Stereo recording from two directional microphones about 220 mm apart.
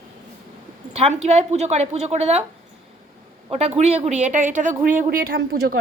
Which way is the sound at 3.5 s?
30° right (ahead or behind).